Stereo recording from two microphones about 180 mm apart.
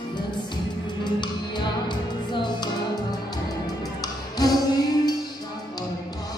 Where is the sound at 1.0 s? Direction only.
25° left (ahead or behind).